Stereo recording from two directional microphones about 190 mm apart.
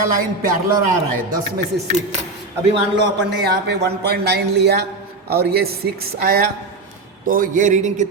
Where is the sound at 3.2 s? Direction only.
60° right (ahead or behind).